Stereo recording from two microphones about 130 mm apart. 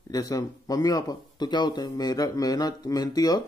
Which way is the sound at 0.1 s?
30° left (ahead or behind).